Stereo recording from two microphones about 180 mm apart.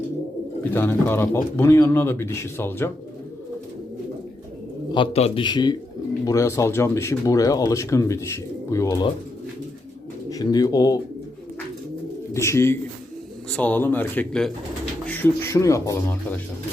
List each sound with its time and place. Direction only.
0.7 s speech: 10° left (ahead or behind)
4.9 s a man's voice: 30° left (ahead or behind)
10.2 s speech: 20° left (ahead or behind)
12.3 s speech: 15° left (ahead or behind)